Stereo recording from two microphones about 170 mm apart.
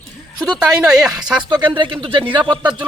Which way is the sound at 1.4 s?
25° right (ahead or behind).